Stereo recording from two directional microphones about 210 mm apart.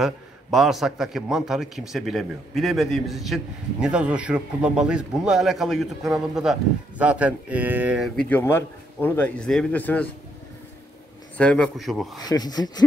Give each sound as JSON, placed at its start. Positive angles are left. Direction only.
{"t": 0.0, "sound": "a man's voice", "side_deg": 0}
{"t": 11.3, "sound": "a man's voice", "side_deg": 5}
{"t": 12.3, "sound": "speech", "side_deg": 20}